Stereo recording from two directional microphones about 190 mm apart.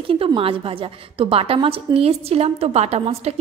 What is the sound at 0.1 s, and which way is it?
A woman's voice, 30° right (ahead or behind).